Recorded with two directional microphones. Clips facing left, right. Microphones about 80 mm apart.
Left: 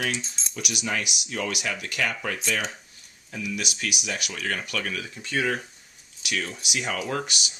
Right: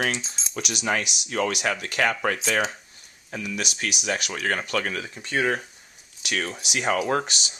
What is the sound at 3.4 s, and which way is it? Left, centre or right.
Speech, right.